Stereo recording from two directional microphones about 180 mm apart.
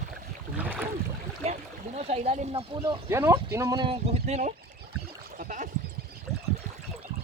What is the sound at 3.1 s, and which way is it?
Speech, 15° right (ahead or behind).